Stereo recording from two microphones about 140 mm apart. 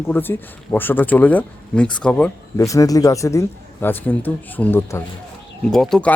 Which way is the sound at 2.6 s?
25° left (ahead or behind).